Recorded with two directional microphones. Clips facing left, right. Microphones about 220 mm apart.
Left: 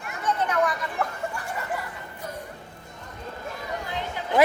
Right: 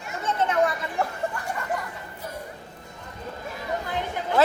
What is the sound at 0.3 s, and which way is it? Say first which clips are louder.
Children playing: right 1 dB; 25° right (ahead or behind).